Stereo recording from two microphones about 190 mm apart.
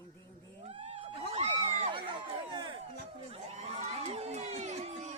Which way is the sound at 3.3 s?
35° right (ahead or behind).